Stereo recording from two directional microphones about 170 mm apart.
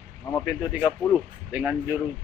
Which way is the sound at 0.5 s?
5° right (ahead or behind).